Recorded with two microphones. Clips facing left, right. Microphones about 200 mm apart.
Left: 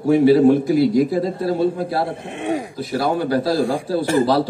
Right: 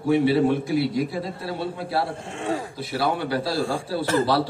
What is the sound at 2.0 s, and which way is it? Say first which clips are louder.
Speech: left 4 dB; 20° left (ahead or behind).